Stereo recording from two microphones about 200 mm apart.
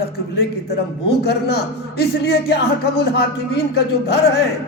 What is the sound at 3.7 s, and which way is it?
Music, 55° left (ahead or behind).